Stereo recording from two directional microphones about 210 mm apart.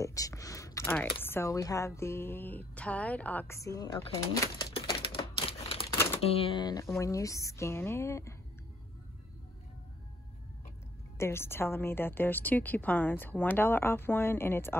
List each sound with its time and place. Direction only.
0.0 s a woman's voice: 15° left (ahead or behind)
4.7 s typewriter: 25° left (ahead or behind)
6.2 s a woman's voice: 25° left (ahead or behind)
11.1 s a woman's voice: 10° left (ahead or behind)